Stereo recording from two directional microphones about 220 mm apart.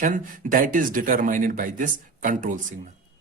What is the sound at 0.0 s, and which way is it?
Speech, 35° right (ahead or behind).